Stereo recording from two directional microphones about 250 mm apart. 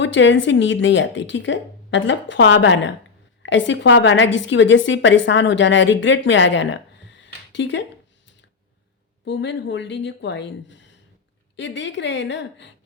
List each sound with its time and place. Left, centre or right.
0.0 s a woman's voice: left
9.2 s a woman's voice: left